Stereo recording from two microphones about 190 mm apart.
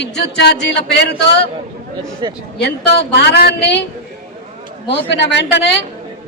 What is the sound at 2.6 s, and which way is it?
Speech, 65° left (ahead or behind).